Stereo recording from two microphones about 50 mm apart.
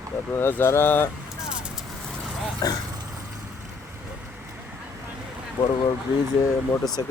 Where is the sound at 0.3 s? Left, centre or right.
Left.